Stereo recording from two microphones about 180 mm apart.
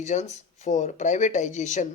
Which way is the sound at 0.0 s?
40° left (ahead or behind).